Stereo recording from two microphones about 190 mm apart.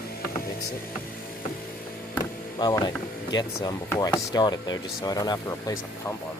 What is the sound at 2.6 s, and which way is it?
Speech, 20° left (ahead or behind).